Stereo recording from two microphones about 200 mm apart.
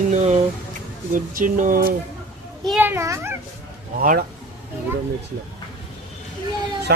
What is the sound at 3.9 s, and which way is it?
Speech, 45° right (ahead or behind).